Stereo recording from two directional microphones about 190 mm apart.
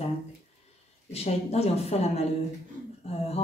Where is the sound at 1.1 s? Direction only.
35° left (ahead or behind).